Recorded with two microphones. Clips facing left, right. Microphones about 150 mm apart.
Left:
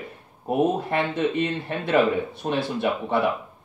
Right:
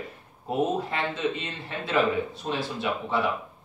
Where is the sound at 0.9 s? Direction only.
60° left (ahead or behind).